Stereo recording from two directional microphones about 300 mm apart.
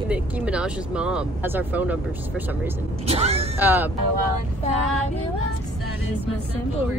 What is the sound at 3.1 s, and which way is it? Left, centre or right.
Speech, centre.